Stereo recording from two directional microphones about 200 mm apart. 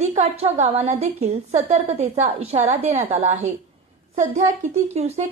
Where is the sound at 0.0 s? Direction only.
35° right (ahead or behind).